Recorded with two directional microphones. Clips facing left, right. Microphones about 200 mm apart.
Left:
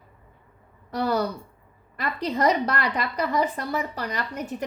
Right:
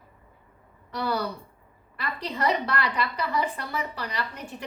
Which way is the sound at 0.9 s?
45° left (ahead or behind).